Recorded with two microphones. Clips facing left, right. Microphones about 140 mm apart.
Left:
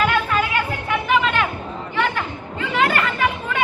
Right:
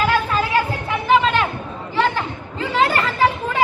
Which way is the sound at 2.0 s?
30° right (ahead or behind).